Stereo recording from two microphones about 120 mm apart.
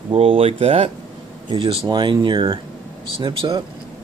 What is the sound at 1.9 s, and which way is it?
Speech, 35° right (ahead or behind).